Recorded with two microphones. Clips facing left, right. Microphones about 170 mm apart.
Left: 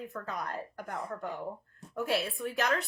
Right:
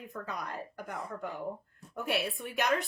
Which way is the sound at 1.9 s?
20° right (ahead or behind).